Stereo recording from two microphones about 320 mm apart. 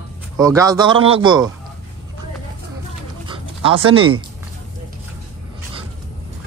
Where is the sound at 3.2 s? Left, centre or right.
Centre.